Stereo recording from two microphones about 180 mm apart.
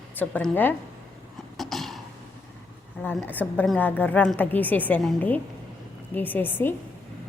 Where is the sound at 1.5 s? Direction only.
Centre (ahead or behind).